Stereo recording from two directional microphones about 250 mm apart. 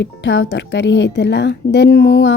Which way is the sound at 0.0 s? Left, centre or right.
Left.